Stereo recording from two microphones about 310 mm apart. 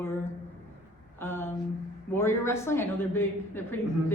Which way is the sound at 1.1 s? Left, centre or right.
Centre.